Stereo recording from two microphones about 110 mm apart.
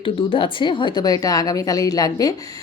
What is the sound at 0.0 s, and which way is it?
Speech, 55° left (ahead or behind).